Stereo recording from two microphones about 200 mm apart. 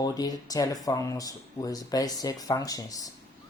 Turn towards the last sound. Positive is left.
turn(degrees=15)  # may be behind; listen again after turning